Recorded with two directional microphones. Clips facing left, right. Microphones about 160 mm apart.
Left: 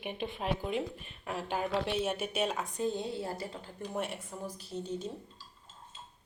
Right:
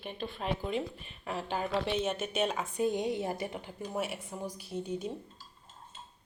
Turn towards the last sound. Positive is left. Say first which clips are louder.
# right 2 dB
turn(degrees=-10)  # may be behind; listen again after turning